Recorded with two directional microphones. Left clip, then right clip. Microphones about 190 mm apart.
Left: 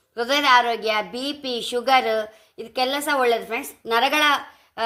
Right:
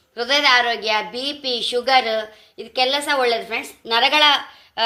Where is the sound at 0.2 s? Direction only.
50° left (ahead or behind).